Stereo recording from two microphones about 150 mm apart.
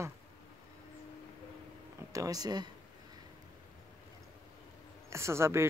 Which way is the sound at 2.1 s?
25° right (ahead or behind).